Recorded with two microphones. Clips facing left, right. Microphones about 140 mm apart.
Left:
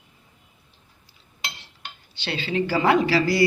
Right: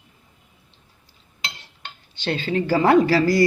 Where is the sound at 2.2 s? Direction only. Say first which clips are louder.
Right 2 dB; 45° right (ahead or behind).